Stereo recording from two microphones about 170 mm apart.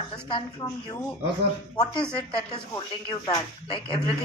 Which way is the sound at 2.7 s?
25° left (ahead or behind).